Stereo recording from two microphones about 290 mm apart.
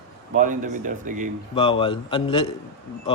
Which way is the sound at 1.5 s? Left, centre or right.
Centre.